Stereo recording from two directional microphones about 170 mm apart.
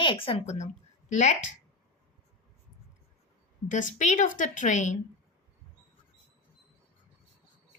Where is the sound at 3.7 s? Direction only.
45° left (ahead or behind).